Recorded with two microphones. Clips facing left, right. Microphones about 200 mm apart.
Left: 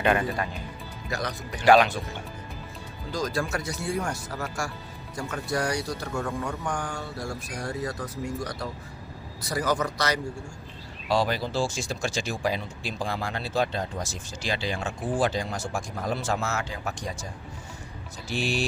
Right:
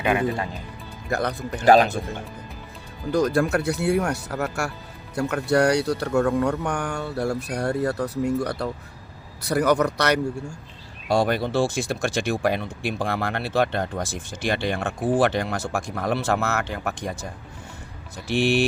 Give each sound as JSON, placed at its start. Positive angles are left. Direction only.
{"t": 0.0, "sound": "speech", "side_deg": -10}
{"t": 1.1, "sound": "speech", "side_deg": -60}
{"t": 1.6, "sound": "speech", "side_deg": -40}
{"t": 3.1, "sound": "speech", "side_deg": -60}
{"t": 11.1, "sound": "speech", "side_deg": -55}
{"t": 18.3, "sound": "speech", "side_deg": -65}